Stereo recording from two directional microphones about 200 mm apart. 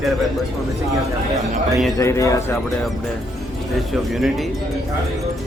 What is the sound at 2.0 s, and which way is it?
Speech, 15° left (ahead or behind).